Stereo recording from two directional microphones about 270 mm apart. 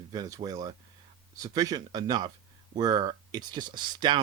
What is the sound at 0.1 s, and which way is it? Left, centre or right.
Speech, centre.